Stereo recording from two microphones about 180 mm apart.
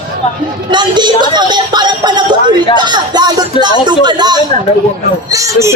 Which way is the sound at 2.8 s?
25° right (ahead or behind).